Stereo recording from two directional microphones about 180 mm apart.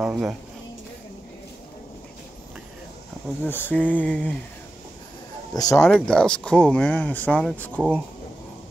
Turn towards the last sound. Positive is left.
turn(degrees=5)  # may be behind; listen again after turning